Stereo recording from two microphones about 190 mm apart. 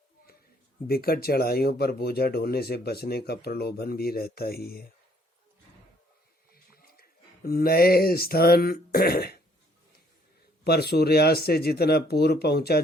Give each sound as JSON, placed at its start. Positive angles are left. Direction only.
{"t": 0.9, "sound": "speech", "side_deg": 50}
{"t": 6.5, "sound": "a sound", "side_deg": 50}
{"t": 10.6, "sound": "speech", "side_deg": 55}